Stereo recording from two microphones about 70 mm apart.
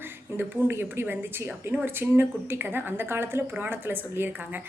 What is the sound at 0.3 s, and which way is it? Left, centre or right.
A woman's voice, right.